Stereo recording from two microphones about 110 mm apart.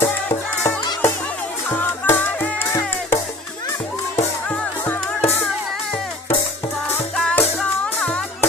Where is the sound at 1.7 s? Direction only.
15° left (ahead or behind).